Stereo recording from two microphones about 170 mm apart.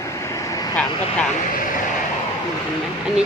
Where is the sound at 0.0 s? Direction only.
15° left (ahead or behind).